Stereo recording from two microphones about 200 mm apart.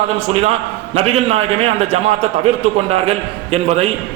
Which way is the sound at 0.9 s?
30° right (ahead or behind).